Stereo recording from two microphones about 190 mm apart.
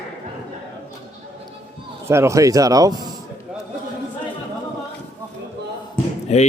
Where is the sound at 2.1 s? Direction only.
15° right (ahead or behind).